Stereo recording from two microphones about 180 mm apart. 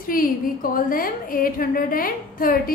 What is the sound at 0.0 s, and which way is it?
A woman's voice, 50° left (ahead or behind).